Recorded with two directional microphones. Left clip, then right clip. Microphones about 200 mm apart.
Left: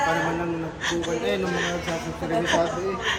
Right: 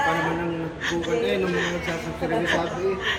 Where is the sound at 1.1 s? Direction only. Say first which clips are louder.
Right 2 dB; 10° left (ahead or behind).